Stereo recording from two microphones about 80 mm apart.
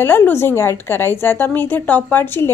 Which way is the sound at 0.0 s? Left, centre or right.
Left.